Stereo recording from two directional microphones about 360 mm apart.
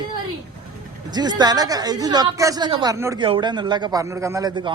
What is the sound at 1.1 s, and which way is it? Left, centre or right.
Speech, centre.